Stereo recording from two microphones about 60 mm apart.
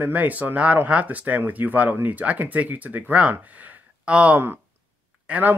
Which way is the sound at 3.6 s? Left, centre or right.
Centre.